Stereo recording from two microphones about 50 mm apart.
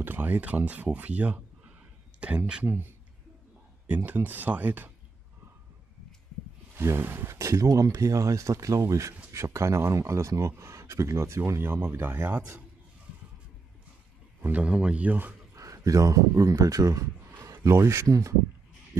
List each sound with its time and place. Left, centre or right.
0.0 s speech: right
2.6 s speech: right
6.8 s speech: right
7.2 s speech: right
9.3 s speech: right
14.6 s speech: right
15.5 s speech: right
17.5 s speech: right